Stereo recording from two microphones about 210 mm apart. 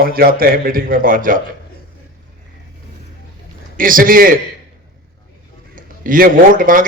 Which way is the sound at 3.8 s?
40° right (ahead or behind).